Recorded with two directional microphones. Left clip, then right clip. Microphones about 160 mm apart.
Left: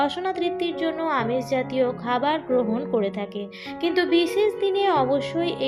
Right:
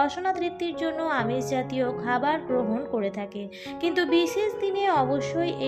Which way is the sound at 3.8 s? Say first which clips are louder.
Left 2 dB; 35° right (ahead or behind).